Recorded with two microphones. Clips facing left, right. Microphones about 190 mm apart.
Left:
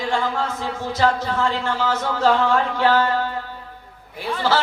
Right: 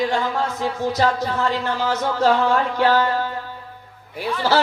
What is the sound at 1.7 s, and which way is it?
Music, 40° right (ahead or behind).